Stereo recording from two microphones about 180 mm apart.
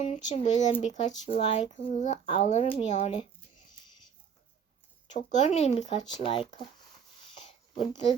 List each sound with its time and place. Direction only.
0.0 s speech: 40° left (ahead or behind)
5.1 s speech: 40° left (ahead or behind)